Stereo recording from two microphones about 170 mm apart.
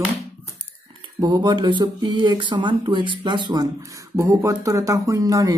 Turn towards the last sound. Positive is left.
turn(degrees=-20)  # may be behind; listen again after turning